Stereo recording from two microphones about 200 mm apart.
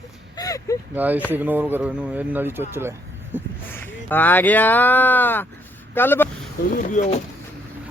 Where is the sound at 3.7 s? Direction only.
10° left (ahead or behind).